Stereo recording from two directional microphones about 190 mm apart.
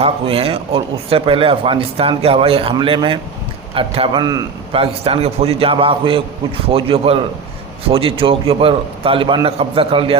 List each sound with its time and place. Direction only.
0.0 s speech: 30° right (ahead or behind)